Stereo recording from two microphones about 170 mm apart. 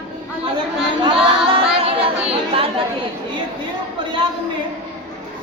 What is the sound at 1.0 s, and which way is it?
Singing, 30° right (ahead or behind).